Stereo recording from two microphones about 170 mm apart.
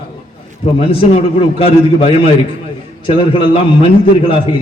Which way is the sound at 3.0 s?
30° left (ahead or behind).